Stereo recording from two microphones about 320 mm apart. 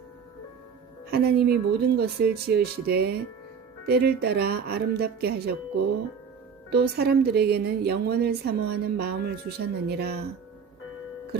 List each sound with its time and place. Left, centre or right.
1.1 s speech: right
6.7 s a woman's voice: right